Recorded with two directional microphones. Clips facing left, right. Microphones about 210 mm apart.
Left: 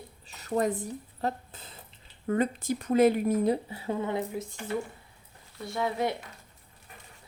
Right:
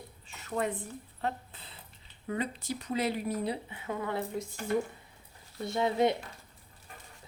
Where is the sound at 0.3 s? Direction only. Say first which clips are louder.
Left 5 dB; 40° left (ahead or behind).